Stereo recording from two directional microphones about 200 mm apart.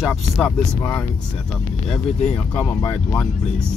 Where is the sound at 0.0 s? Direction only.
Centre (ahead or behind).